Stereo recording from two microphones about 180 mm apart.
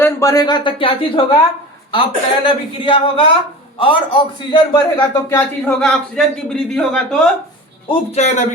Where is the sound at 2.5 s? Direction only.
30° left (ahead or behind).